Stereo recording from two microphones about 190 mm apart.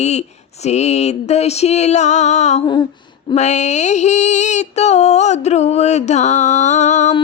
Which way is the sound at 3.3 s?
35° left (ahead or behind).